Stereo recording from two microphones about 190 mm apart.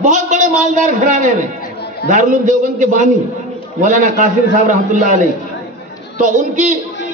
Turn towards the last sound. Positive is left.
turn(degrees=-40)  # may be behind; listen again after turning